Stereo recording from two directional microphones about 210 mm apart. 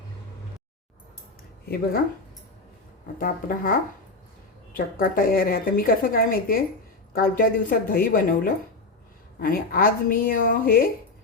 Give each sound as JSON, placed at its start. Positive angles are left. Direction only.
{"t": 1.6, "sound": "a woman's voice", "side_deg": 50}
{"t": 3.2, "sound": "a woman's voice", "side_deg": 40}